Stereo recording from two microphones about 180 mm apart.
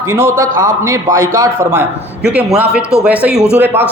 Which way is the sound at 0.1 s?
15° right (ahead or behind).